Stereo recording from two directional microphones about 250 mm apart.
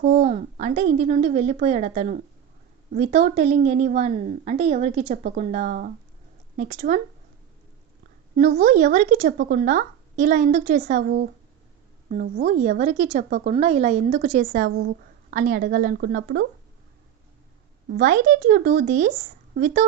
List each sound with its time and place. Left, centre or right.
0.0 s a woman's voice: right
8.4 s a woman's voice: right
17.9 s a woman's voice: right